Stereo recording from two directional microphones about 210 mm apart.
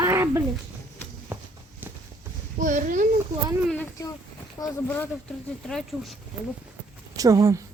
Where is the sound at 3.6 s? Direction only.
5° left (ahead or behind).